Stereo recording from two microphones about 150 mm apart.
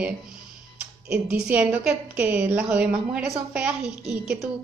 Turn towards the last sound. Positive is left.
turn(degrees=-5)  # may be behind; listen again after turning